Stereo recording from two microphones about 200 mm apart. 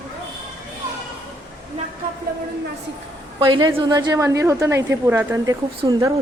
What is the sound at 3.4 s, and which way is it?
A woman's voice, 25° right (ahead or behind).